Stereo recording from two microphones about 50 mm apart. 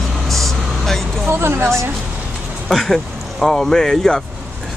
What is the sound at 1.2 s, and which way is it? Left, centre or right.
Speech, right.